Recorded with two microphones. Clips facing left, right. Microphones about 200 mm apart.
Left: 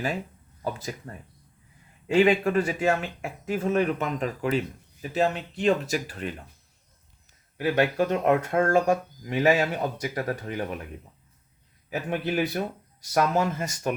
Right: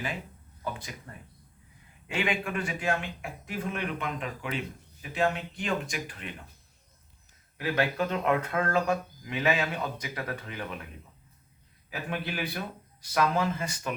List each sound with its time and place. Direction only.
0.6 s a man's voice: 40° left (ahead or behind)
7.6 s a man's voice: 45° left (ahead or behind)
11.9 s speech: 45° left (ahead or behind)